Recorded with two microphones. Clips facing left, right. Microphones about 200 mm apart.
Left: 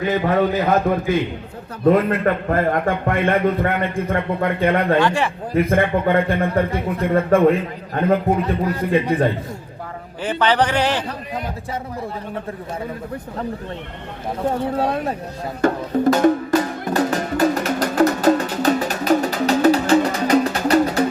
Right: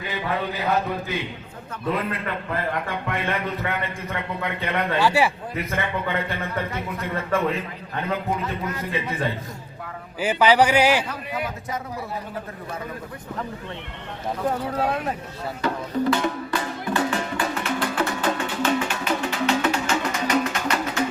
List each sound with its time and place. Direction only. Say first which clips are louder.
0.1 s a man's voice: left 9 dB; 45° left (ahead or behind)
4.9 s speech: left 2 dB; 10° right (ahead or behind)
5.5 s a man's voice: left 12 dB; 50° left (ahead or behind)
8.4 s speech: left 8 dB; 35° left (ahead or behind)
9.1 s a man's voice: left 9 dB; 55° left (ahead or behind)
10.2 s speech: even; 10° right (ahead or behind)
14.4 s speech: left 4 dB; 25° left (ahead or behind)
15.6 s music: left 6 dB; 45° left (ahead or behind)